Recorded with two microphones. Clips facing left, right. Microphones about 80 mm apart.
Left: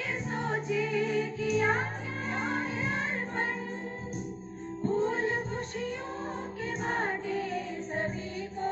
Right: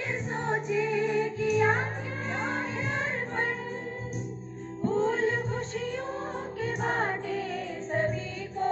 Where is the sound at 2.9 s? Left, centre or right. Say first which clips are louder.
Right 1 dB; right.